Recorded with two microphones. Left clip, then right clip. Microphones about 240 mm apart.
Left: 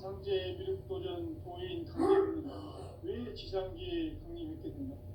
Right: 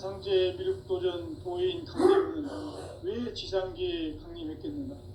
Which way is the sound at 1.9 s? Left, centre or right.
Right.